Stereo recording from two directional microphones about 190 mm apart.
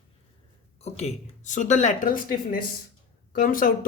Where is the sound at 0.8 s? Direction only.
35° left (ahead or behind).